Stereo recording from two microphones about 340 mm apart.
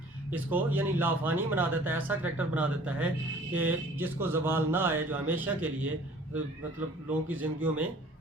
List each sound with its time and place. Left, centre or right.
0.3 s speech: centre
7.3 s speech: centre